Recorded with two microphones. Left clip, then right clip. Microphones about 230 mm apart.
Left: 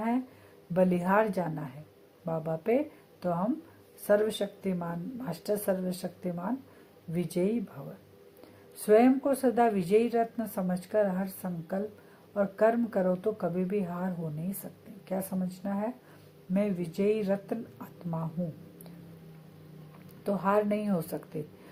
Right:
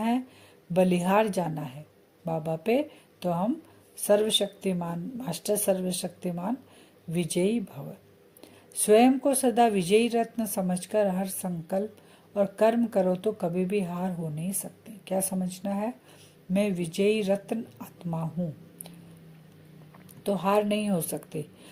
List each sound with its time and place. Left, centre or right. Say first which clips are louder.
0.7 s speech: right 3 dB; right
8.9 s speech: right 2 dB; right
20.2 s speech: right 2 dB; right